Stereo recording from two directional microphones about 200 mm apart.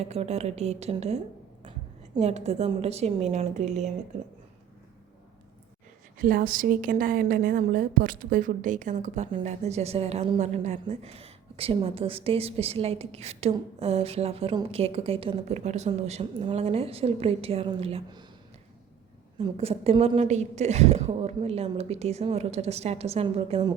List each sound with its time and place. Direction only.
0.0 s a woman's voice: 30° right (ahead or behind)
6.2 s a woman's voice: 45° right (ahead or behind); by 18.3 s 25° right (ahead or behind)
19.4 s a woman's voice: 30° right (ahead or behind)